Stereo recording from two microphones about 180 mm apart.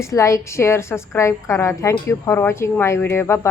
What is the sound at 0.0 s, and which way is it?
A woman's voice, 15° left (ahead or behind).